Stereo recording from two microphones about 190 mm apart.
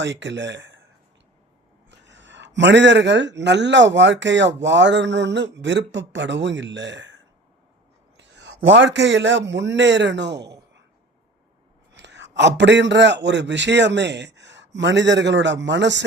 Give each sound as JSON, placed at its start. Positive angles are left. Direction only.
{"t": 0.0, "sound": "a man's voice", "side_deg": -75}
{"t": 1.9, "sound": "a man's voice", "side_deg": -70}
{"t": 8.2, "sound": "a man's voice", "side_deg": -65}
{"t": 11.9, "sound": "a man's voice", "side_deg": -65}